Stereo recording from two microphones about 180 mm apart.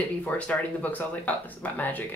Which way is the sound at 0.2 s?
10° left (ahead or behind).